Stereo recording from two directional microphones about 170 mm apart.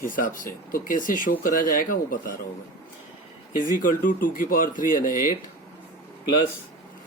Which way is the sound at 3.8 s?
50° left (ahead or behind).